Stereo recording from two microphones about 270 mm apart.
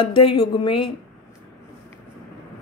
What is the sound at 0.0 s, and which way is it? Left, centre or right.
Speech, left.